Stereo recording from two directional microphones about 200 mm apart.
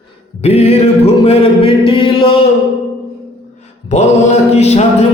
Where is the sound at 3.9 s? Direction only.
35° left (ahead or behind).